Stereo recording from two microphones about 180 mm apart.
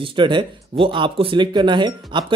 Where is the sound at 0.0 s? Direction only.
30° right (ahead or behind).